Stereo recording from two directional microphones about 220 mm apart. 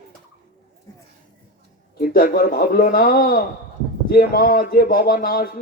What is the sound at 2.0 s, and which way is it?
Speech, 40° left (ahead or behind).